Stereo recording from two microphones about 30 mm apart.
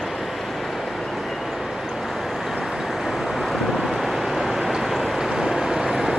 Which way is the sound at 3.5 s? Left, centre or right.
Centre.